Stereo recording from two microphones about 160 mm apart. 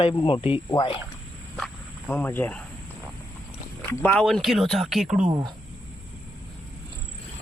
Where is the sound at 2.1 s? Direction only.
10° left (ahead or behind).